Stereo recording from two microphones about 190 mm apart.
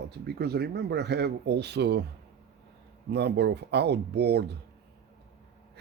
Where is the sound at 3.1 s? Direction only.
60° right (ahead or behind).